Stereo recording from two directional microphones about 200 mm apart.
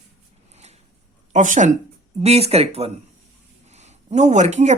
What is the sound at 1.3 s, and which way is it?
Speech, 40° right (ahead or behind).